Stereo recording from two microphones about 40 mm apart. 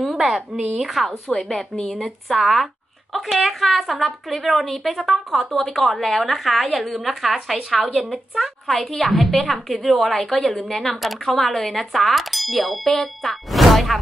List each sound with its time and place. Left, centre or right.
0.1 s a sound: centre
0.7 s a woman's voice: centre
12.8 s speech: centre
13.2 s a woman's voice: centre